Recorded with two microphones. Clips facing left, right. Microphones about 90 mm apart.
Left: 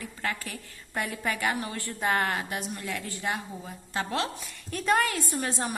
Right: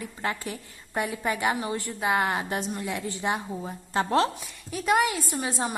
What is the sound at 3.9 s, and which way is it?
Speech, 35° right (ahead or behind).